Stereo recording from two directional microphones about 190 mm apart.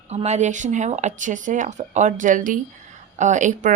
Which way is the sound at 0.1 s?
35° right (ahead or behind).